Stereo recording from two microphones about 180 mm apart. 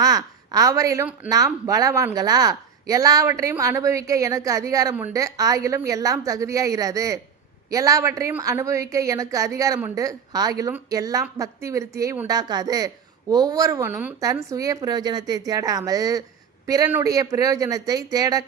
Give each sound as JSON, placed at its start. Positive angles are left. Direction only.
{"t": 0.0, "sound": "a woman's voice", "side_deg": -20}